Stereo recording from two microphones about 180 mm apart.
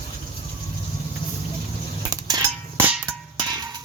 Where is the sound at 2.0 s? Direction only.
20° right (ahead or behind).